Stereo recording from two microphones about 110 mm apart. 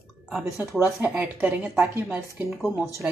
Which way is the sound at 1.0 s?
15° right (ahead or behind).